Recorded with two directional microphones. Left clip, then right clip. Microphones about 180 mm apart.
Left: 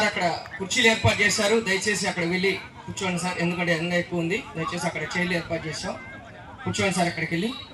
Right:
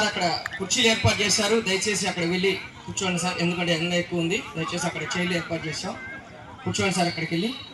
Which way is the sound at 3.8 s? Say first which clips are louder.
Even; centre (ahead or behind).